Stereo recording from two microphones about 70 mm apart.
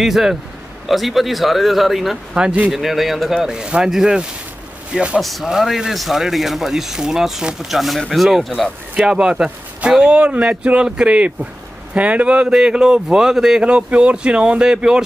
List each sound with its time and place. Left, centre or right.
0.0 s a man's voice: centre
2.3 s speech: centre
2.7 s a man's voice: centre
5.2 s a man's voice: centre
8.9 s speech: centre